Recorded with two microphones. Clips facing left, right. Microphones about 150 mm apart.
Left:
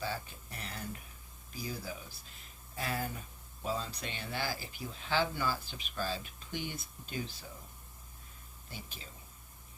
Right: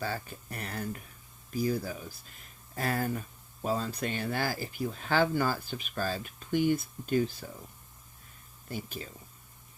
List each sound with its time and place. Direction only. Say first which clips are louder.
0.0 s speech: right 3 dB; 55° right (ahead or behind)
8.7 s speech: right 11 dB; 50° right (ahead or behind)